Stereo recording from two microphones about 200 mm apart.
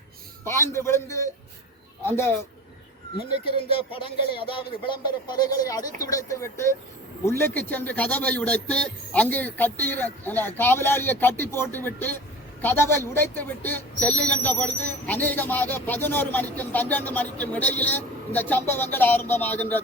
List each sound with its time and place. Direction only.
0.4 s speech: 15° left (ahead or behind)
3.6 s speech: 25° left (ahead or behind); by 19.8 s 10° left (ahead or behind)